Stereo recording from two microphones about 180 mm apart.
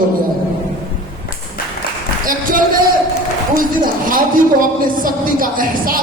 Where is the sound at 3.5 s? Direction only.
50° right (ahead or behind).